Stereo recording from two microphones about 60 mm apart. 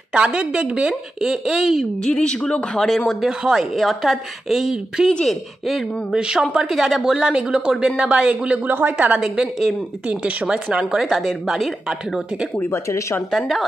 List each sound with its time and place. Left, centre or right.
0.1 s speech: centre
2.0 s speech: centre
3.1 s a woman's voice: centre
6.1 s speech: centre
8.6 s speech: right
9.2 s speech: centre
12.7 s speech: left